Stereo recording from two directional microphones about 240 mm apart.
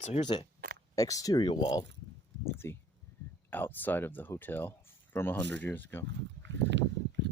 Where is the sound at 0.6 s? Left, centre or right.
Right.